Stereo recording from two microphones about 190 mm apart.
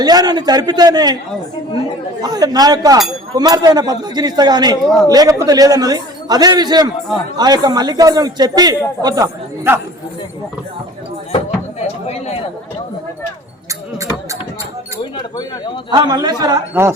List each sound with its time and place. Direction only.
0.0 s a man's voice: 20° right (ahead or behind)
2.2 s a man's voice: 20° right (ahead or behind)
11.3 s chop: 35° left (ahead or behind)
15.9 s a man's voice: 20° right (ahead or behind)